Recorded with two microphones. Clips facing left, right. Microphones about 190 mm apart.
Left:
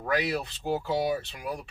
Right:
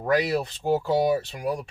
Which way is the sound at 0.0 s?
40° right (ahead or behind).